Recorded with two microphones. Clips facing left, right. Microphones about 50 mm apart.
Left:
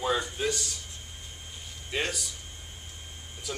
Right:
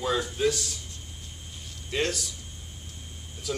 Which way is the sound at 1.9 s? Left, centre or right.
Centre.